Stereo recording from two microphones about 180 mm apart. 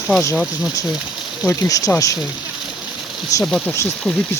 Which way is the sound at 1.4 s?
20° left (ahead or behind).